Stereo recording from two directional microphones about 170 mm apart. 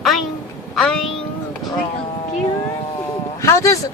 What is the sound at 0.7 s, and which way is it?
Speech, centre (ahead or behind).